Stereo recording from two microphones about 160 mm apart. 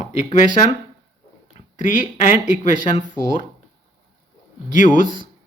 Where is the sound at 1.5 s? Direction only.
50° left (ahead or behind).